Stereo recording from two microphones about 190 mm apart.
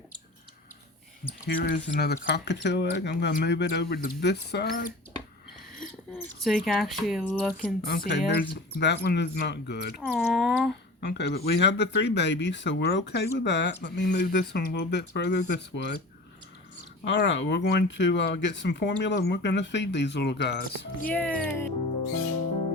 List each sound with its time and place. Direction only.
1.5 s speech: 60° left (ahead or behind)
6.1 s speech: centre (ahead or behind)
7.8 s speech: 50° left (ahead or behind)
10.2 s speech: centre (ahead or behind)
11.2 s speech: 60° left (ahead or behind)
17.0 s speech: 70° left (ahead or behind); by 21.1 s 55° left (ahead or behind)
21.1 s speech: 5° left (ahead or behind)